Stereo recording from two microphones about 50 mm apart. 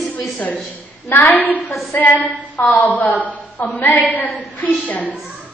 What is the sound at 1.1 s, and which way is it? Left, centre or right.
A woman's voice, left.